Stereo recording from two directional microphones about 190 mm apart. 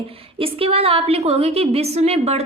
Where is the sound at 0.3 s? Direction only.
30° right (ahead or behind).